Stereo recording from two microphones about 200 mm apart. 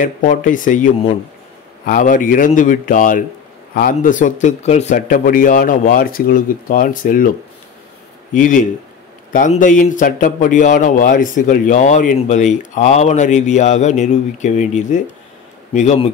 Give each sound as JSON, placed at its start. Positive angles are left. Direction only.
{"t": 0.0, "sound": "speech", "side_deg": 40}